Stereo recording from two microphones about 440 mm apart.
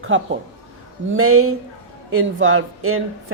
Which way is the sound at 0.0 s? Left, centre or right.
Right.